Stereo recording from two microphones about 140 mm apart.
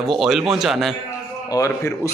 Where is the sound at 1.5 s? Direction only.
20° left (ahead or behind).